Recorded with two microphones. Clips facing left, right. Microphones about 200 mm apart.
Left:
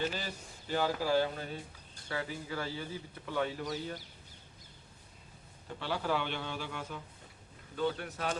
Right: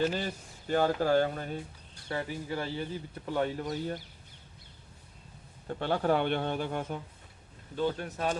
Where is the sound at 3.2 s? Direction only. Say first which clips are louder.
Right 3 dB; 45° right (ahead or behind).